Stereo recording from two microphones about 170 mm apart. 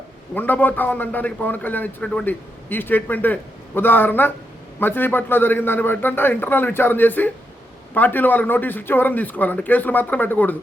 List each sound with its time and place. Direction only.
0.3 s a man's voice: 10° left (ahead or behind)